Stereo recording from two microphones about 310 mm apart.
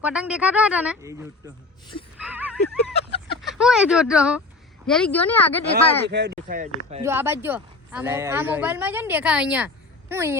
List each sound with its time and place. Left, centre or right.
0.0 s speech: centre
2.2 s a sound: centre
3.4 s speech: centre
5.7 s speech: right
7.0 s speech: centre